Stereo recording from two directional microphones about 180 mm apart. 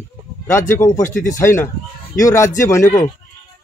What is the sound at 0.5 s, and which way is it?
A man's voice, 15° left (ahead or behind).